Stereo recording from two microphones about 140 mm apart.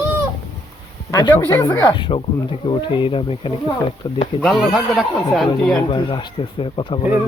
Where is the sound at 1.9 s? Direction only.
35° left (ahead or behind).